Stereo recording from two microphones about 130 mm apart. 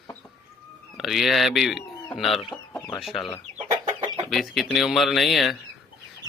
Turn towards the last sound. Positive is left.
turn(degrees=0)  # may be behind; listen again after turning